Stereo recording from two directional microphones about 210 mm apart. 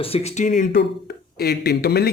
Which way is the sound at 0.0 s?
30° left (ahead or behind).